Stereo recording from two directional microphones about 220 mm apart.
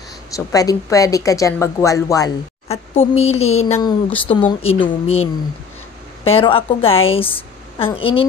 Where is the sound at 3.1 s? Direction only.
30° left (ahead or behind).